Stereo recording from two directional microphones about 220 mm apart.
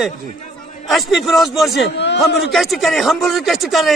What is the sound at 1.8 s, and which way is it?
Speech, 50° left (ahead or behind).